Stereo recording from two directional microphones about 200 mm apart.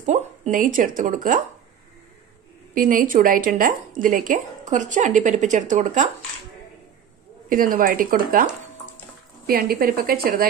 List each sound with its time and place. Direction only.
0.0 s speech: 35° right (ahead or behind)
2.7 s a woman's voice: 40° right (ahead or behind)
7.4 s speech: 45° right (ahead or behind)
9.5 s speech: 50° right (ahead or behind)